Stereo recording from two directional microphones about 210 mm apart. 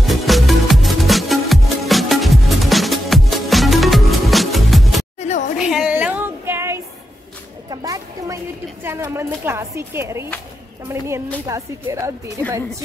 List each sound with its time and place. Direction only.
0.0 s music: centre (ahead or behind)
5.6 s female singing: 5° right (ahead or behind)
7.7 s a sound: 15° right (ahead or behind)
8.8 s a woman's voice: 10° right (ahead or behind)